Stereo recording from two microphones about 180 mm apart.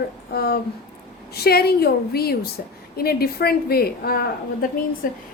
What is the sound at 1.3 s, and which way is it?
A woman's voice, 60° left (ahead or behind).